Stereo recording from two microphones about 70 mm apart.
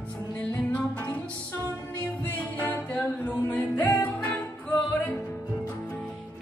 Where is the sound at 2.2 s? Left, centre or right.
Left.